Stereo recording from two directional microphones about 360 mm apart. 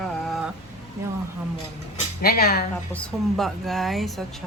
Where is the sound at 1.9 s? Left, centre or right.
Left.